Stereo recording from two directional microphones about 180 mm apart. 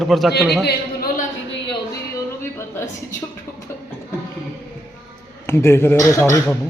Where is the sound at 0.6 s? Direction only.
65° left (ahead or behind).